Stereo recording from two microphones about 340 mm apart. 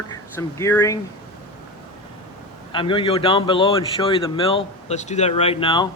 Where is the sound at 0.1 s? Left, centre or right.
Centre.